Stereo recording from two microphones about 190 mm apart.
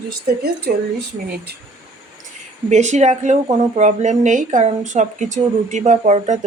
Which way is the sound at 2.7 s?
40° right (ahead or behind).